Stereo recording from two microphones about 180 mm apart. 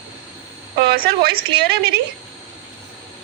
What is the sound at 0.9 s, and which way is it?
A woman's voice, 60° right (ahead or behind).